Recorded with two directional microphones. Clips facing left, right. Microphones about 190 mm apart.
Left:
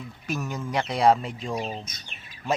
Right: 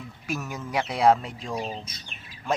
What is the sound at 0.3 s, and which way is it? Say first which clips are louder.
Speech: left 2 dB; 5° right (ahead or behind).